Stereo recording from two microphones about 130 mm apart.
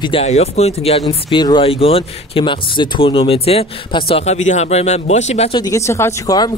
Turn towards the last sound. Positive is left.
turn(degrees=20)  # may be behind; listen again after turning